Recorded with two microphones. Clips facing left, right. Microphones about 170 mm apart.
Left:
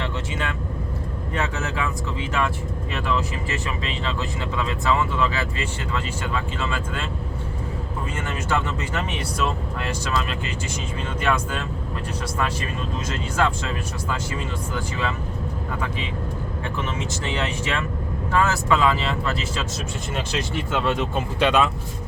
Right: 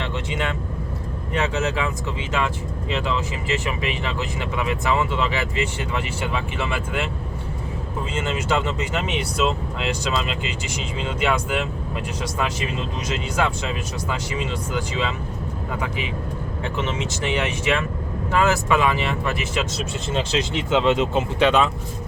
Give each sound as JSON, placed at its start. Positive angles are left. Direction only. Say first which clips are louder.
{"t": 0.0, "sound": "vehicle", "louder": "right 2 dB", "side_deg": -20}
{"t": 1.3, "sound": "speech", "louder": "right 4 dB", "side_deg": -20}
{"t": 2.9, "sound": "speech", "louder": "right 1 dB", "side_deg": -20}
{"t": 8.1, "sound": "speech", "louder": "right 3 dB", "side_deg": -20}
{"t": 16.7, "sound": "speech", "louder": "right 3 dB", "side_deg": -20}